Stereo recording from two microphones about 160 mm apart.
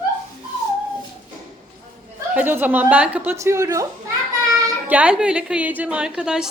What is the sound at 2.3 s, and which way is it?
A woman's voice, 10° right (ahead or behind).